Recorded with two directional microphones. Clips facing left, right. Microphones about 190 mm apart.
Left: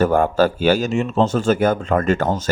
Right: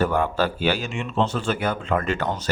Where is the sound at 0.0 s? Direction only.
45° left (ahead or behind).